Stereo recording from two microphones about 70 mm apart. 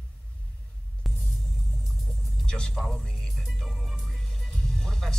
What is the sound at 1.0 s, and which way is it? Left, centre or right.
Music, centre.